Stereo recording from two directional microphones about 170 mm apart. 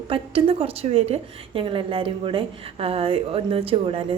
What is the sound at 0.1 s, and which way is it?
A woman's voice, 35° right (ahead or behind).